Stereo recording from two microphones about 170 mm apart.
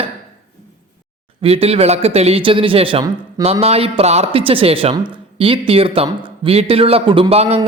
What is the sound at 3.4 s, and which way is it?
Speech, 35° right (ahead or behind).